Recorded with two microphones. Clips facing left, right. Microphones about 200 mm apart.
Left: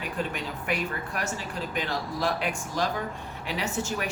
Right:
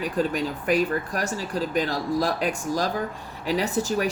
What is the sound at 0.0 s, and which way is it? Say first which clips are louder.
Speech: right 7 dB; 40° right (ahead or behind).